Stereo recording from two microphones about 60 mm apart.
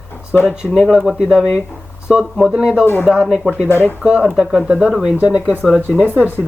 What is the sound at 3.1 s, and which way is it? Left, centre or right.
Speech, centre.